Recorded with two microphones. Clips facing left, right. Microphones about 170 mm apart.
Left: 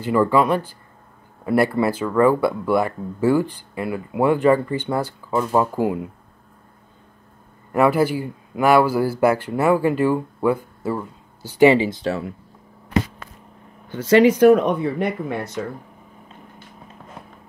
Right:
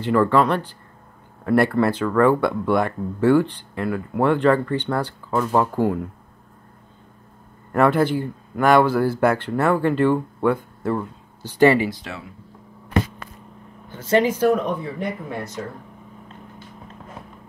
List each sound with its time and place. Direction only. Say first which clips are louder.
0.0 s speech: even; 5° left (ahead or behind)
7.7 s speech: even; 5° left (ahead or behind); by 12.1 s 25° left (ahead or behind)
12.1 s speech: left 11 dB; 50° left (ahead or behind)
13.8 s speech: left 5 dB; 80° left